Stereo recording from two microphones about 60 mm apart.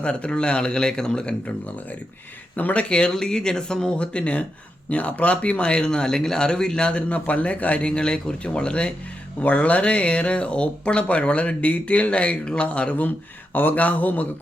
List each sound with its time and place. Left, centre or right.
0.0 s speech: centre
2.6 s speech: left
2.9 s speech: centre
7.9 s speech: centre
13.5 s speech: left